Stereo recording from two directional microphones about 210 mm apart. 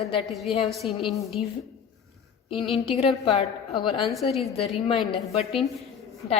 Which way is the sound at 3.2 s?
30° left (ahead or behind).